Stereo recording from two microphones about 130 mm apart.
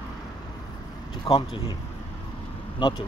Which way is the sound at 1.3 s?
30° left (ahead or behind).